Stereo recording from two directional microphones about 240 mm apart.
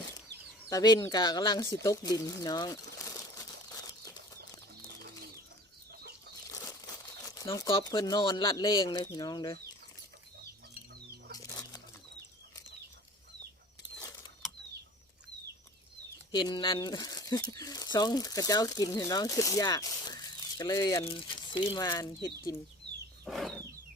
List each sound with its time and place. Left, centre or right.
0.7 s speech: centre
1.7 s crumpling: centre
4.4 s bird: right
6.5 s speech: centre
11.3 s bird flight: centre
16.3 s speech: centre
23.2 s a sound: centre